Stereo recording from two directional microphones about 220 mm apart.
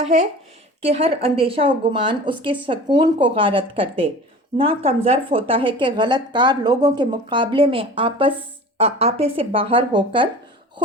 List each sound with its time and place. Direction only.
0.0 s speech: 30° right (ahead or behind)